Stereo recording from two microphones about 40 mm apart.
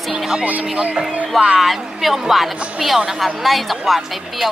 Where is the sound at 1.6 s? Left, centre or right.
Centre.